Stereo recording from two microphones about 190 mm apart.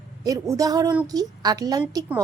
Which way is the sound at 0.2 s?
15° right (ahead or behind).